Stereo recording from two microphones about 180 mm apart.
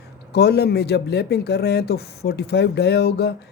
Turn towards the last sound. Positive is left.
turn(degrees=65)  # may be behind; listen again after turning